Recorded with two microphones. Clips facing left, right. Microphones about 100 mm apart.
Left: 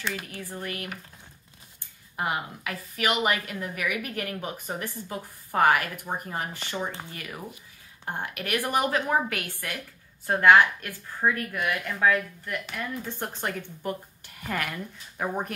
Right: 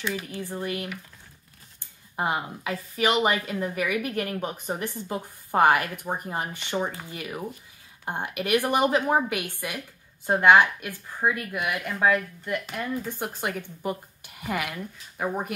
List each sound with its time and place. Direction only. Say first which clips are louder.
0.0 s speech: right 3 dB; 10° right (ahead or behind)